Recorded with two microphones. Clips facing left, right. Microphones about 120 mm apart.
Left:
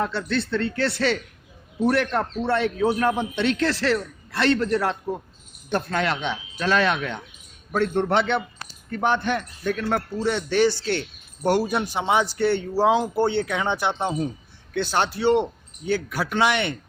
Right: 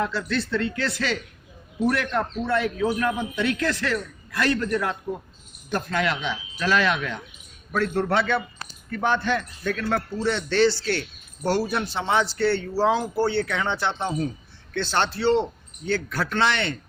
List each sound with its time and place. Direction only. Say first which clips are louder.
0.0 s a man's voice: left 1 dB; 30° left (ahead or behind); by 16.7 s 15° left (ahead or behind)